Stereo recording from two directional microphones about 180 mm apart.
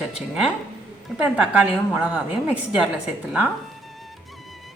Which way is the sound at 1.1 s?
5° right (ahead or behind).